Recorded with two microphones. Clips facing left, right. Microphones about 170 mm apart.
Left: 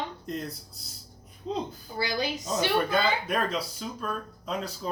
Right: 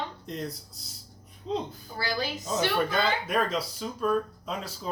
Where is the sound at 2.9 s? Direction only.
Centre (ahead or behind).